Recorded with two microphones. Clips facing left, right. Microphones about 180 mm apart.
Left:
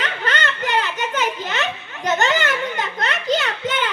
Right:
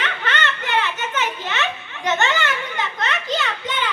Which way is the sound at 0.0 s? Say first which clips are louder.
Left 1 dB; 40° left (ahead or behind).